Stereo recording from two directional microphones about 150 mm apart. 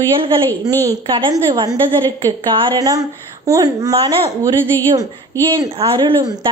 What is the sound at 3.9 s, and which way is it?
Speech, 40° right (ahead or behind).